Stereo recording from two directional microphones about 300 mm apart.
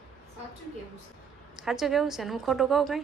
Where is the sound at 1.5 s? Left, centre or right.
Centre.